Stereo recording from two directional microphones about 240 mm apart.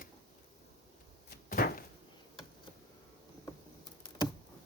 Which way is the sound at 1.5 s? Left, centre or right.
Left.